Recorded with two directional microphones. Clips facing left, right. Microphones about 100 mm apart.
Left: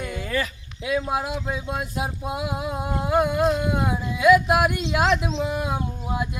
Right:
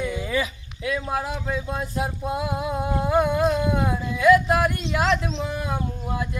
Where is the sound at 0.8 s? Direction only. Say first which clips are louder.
Left 2 dB; 20° left (ahead or behind).